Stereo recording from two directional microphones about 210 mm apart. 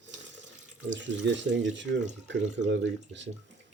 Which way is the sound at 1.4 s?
60° right (ahead or behind).